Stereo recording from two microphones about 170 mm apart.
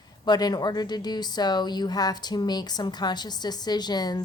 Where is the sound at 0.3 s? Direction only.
25° left (ahead or behind).